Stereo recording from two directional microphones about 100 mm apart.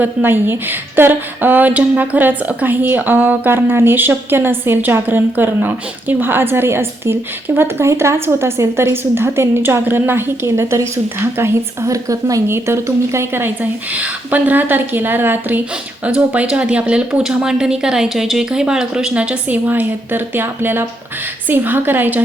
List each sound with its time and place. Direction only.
0.0 s a woman's voice: 20° right (ahead or behind)